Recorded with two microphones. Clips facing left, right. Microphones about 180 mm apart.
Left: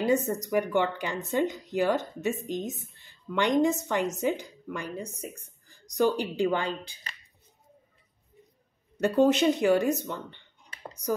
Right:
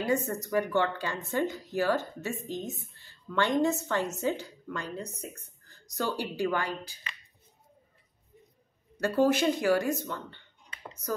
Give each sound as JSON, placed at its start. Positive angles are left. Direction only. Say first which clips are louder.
{"t": 0.0, "sound": "a woman's voice", "louder": "left 3 dB", "side_deg": 20}
{"t": 9.0, "sound": "speech", "louder": "left 3 dB", "side_deg": 20}